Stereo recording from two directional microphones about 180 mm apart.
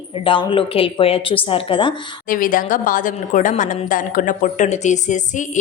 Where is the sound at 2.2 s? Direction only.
50° left (ahead or behind).